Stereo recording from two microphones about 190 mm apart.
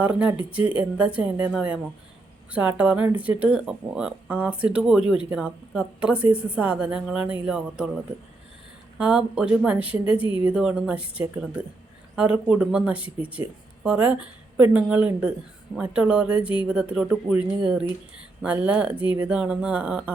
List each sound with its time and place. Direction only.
0.0 s speech: 5° right (ahead or behind)
9.0 s speech: 5° right (ahead or behind)
10.2 s a woman's voice: 25° left (ahead or behind)
10.4 s speech: 5° right (ahead or behind)
18.4 s speech: 5° right (ahead or behind)